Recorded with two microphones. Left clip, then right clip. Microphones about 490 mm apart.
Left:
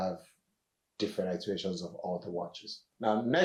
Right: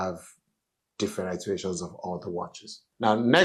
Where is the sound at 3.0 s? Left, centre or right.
Right.